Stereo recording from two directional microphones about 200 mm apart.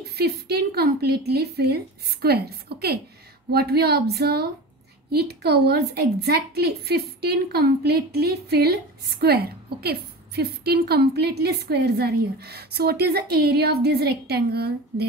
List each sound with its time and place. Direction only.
0.0 s a woman's voice: 55° right (ahead or behind)